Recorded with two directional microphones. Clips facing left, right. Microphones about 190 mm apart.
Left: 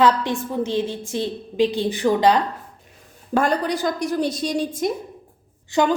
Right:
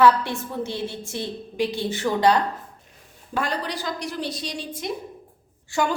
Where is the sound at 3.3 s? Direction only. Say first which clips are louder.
Left 7 dB; 50° left (ahead or behind).